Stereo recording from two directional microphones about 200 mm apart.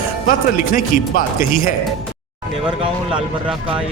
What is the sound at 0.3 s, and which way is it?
Speech, 40° left (ahead or behind).